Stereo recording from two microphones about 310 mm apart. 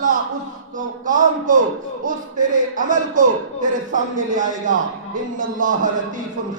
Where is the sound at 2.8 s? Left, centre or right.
Right.